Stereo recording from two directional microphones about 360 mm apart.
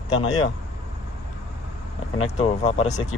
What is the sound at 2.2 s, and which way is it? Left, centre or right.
Speech, centre.